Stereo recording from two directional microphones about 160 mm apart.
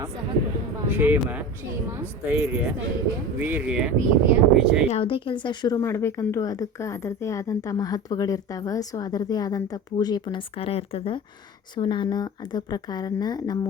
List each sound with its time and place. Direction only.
0.9 s a woman's voice: 10° right (ahead or behind)
4.9 s a woman's voice: 35° left (ahead or behind)